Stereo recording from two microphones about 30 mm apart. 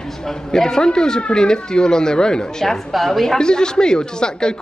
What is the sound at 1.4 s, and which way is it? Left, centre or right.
Speech, left.